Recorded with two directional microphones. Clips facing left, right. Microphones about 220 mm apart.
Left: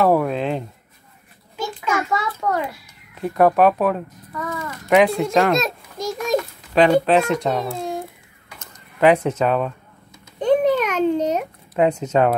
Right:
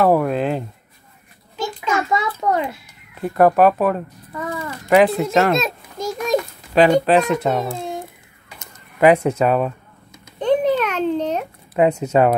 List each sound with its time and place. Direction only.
0.0 s speech: centre (ahead or behind)
2.4 s a child's voice: 25° right (ahead or behind)
3.2 s speech: centre (ahead or behind)
4.3 s a sound: 30° right (ahead or behind)
4.8 s a child's voice: centre (ahead or behind)
7.7 s a sound: centre (ahead or behind)
8.5 s speech: 10° right (ahead or behind)
10.4 s a sound: 10° left (ahead or behind)
11.7 s speech: 5° right (ahead or behind)